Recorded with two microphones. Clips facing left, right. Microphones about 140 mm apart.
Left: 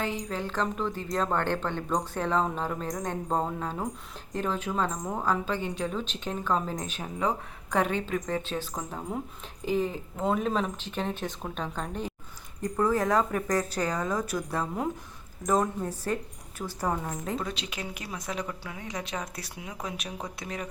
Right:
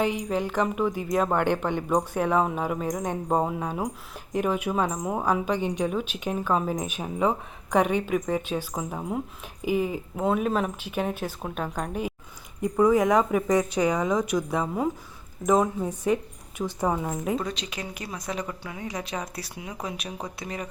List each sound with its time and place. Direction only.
0.0 s a woman's voice: 15° right (ahead or behind)
15.4 s a woman's voice: 10° right (ahead or behind)
16.6 s a woman's voice: 20° right (ahead or behind)
17.4 s speech: 5° left (ahead or behind)